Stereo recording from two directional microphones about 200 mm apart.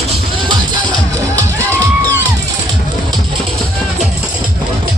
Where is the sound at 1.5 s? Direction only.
15° right (ahead or behind).